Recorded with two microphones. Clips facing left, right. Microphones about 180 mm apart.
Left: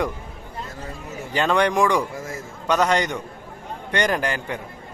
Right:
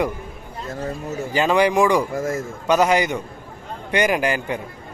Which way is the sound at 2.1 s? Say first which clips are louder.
Right 9 dB; 50° right (ahead or behind).